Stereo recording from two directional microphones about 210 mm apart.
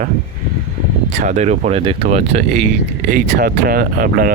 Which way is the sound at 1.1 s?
35° right (ahead or behind).